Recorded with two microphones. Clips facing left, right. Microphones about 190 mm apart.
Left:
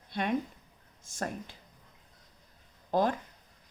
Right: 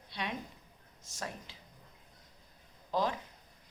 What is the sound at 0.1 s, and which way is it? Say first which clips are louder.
A woman's voice: left 9 dB; 50° left (ahead or behind).